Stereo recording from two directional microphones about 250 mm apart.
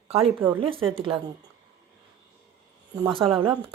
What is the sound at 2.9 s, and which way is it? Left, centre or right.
Speech, centre.